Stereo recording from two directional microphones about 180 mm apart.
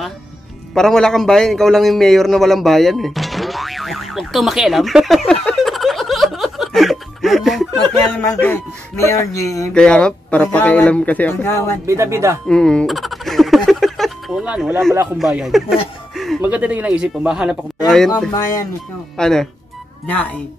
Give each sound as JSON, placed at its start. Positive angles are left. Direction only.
{"t": 0.7, "sound": "a sound", "side_deg": 5}
{"t": 8.2, "sound": "speech", "side_deg": 15}
{"t": 9.8, "sound": "speech", "side_deg": 5}
{"t": 11.8, "sound": "speech", "side_deg": -15}
{"t": 12.4, "sound": "fowl", "side_deg": 5}
{"t": 15.1, "sound": "speech", "side_deg": 0}
{"t": 18.3, "sound": "speech", "side_deg": 20}
{"t": 19.1, "sound": "speech", "side_deg": 5}